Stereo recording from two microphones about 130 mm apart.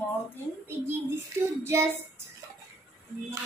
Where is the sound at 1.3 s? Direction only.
20° right (ahead or behind).